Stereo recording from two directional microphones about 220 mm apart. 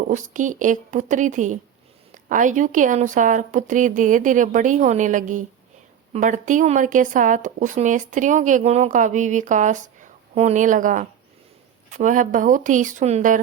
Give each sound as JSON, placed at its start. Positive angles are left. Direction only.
{"t": 0.1, "sound": "speech", "side_deg": -35}